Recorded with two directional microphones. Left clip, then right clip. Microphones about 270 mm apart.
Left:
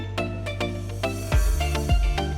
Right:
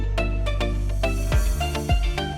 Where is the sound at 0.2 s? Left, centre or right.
Centre.